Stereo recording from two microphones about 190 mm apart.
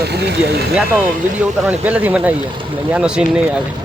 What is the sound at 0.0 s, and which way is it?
Speech, 60° right (ahead or behind).